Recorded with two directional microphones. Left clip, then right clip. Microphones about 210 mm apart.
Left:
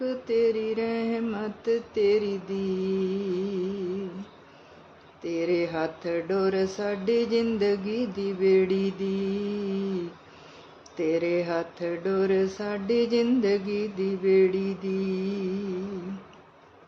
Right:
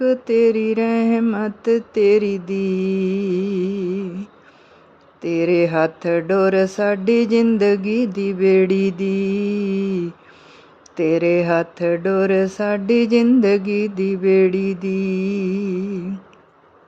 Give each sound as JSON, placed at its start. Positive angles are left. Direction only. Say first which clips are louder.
{"t": 0.0, "sound": "mantra", "louder": "right 9 dB", "side_deg": -40}
{"t": 5.2, "sound": "mantra", "louder": "right 10 dB", "side_deg": -40}